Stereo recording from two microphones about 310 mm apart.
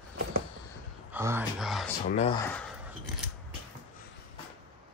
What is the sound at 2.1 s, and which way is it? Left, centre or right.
Speech, centre.